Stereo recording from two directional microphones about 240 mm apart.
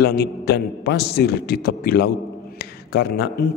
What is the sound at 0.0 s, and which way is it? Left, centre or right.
A man's voice, left.